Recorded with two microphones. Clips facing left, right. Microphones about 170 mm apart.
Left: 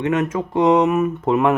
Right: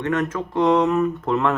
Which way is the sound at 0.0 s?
10° left (ahead or behind).